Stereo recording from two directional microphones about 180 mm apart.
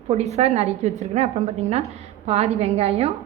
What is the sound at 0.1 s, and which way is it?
A woman's voice, 35° right (ahead or behind).